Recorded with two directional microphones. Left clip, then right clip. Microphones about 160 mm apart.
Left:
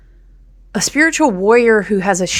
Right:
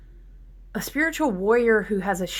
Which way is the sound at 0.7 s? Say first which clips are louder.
Left 11 dB; 40° left (ahead or behind).